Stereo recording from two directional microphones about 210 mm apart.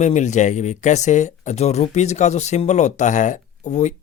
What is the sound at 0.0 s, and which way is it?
Speech, 35° left (ahead or behind).